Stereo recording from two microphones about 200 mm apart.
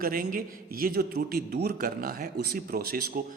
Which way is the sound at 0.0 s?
45° right (ahead or behind).